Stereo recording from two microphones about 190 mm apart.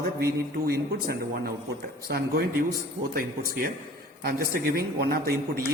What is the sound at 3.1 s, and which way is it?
A man's voice, 50° right (ahead or behind).